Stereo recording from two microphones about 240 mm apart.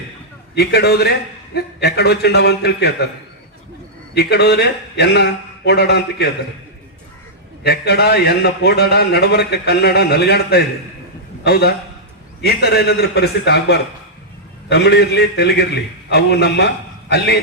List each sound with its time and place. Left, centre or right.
0.5 s a man's voice: left
4.1 s a man's voice: left
7.6 s a man's voice: left